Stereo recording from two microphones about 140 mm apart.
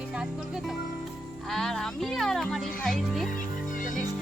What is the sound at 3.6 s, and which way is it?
Music, 65° left (ahead or behind).